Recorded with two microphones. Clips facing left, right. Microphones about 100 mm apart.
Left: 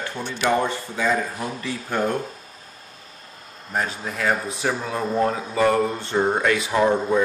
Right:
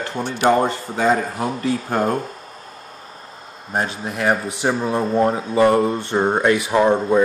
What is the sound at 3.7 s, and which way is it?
Speech, 25° right (ahead or behind).